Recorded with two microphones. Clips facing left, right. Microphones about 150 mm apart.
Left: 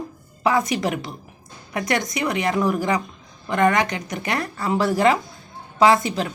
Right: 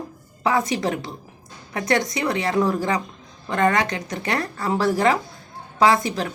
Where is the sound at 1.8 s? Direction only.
15° left (ahead or behind).